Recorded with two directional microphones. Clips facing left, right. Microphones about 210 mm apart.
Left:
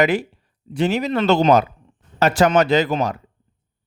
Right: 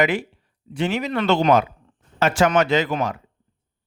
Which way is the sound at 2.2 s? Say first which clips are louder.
Left 2 dB; 35° left (ahead or behind).